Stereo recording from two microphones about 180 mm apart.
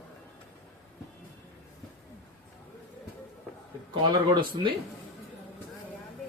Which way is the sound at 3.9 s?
25° right (ahead or behind).